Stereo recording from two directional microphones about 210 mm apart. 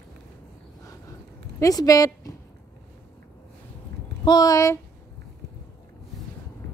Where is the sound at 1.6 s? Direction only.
15° left (ahead or behind).